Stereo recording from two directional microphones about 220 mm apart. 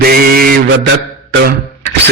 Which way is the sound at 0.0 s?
40° right (ahead or behind).